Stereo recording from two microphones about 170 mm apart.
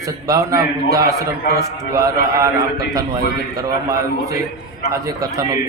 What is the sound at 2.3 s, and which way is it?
A man's voice, 20° right (ahead or behind).